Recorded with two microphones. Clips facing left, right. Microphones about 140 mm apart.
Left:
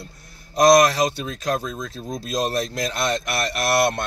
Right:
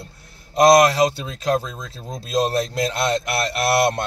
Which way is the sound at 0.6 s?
30° right (ahead or behind).